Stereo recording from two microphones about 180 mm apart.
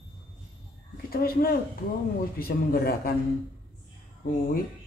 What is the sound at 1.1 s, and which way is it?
Speech, 55° left (ahead or behind).